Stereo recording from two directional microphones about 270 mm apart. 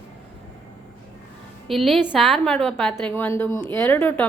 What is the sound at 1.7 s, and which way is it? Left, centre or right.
A woman's voice, centre.